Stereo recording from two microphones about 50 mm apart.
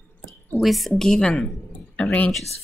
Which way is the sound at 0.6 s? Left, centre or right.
Centre.